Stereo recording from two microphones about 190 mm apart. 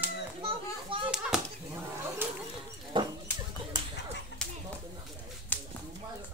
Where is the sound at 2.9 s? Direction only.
25° right (ahead or behind).